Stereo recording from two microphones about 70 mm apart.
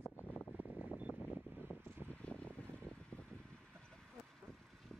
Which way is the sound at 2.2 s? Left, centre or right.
Centre.